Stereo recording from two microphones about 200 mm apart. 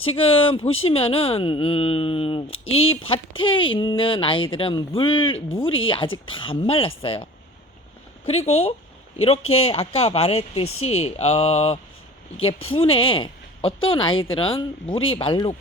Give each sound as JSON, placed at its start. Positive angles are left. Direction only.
{"t": 0.0, "sound": "speech", "side_deg": 30}
{"t": 8.3, "sound": "mantra", "side_deg": 30}
{"t": 9.2, "sound": "speech", "side_deg": 30}
{"t": 11.0, "sound": "mantra", "side_deg": 30}
{"t": 12.4, "sound": "speech", "side_deg": 30}